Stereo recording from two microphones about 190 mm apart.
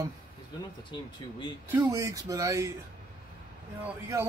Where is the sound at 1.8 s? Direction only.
15° right (ahead or behind).